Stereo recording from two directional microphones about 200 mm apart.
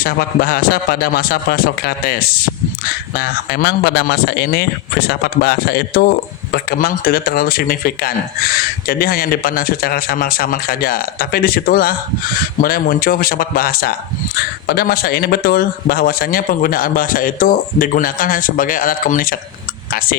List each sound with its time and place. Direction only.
0.0 s speech: 50° left (ahead or behind)